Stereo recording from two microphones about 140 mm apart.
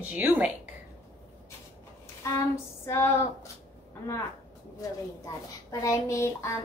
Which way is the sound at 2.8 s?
20° left (ahead or behind).